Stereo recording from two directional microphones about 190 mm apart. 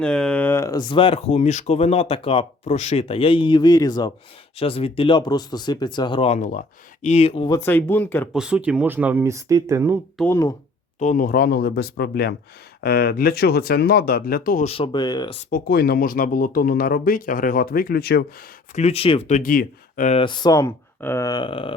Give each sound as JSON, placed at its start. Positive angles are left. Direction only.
{"t": 0.0, "sound": "speech", "side_deg": 5}
{"t": 4.5, "sound": "speech", "side_deg": 30}
{"t": 7.5, "sound": "speech", "side_deg": 10}
{"t": 8.4, "sound": "speech", "side_deg": -5}
{"t": 10.2, "sound": "speech", "side_deg": 15}
{"t": 11.0, "sound": "speech", "side_deg": 45}
{"t": 14.6, "sound": "speech", "side_deg": 30}
{"t": 15.4, "sound": "speech", "side_deg": 45}
{"t": 18.7, "sound": "speech", "side_deg": 35}
{"t": 20.1, "sound": "speech", "side_deg": 25}